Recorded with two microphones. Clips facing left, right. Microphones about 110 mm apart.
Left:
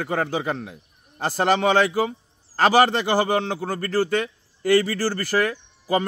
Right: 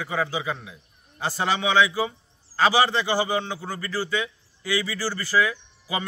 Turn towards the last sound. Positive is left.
turn(degrees=50)  # may be behind; listen again after turning